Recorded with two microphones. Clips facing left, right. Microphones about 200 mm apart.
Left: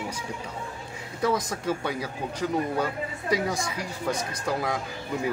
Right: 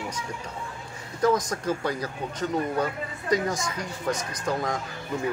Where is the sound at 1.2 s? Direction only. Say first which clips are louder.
Right 3 dB; 5° left (ahead or behind).